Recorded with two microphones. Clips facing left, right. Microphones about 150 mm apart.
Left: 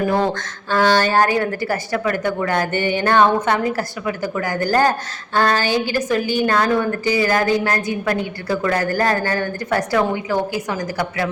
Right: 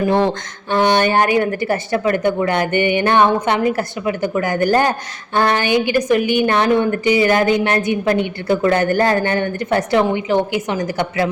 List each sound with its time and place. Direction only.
0.7 s a woman's voice: 20° right (ahead or behind)